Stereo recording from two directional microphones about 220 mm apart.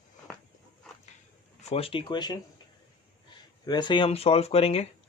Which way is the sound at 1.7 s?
25° left (ahead or behind).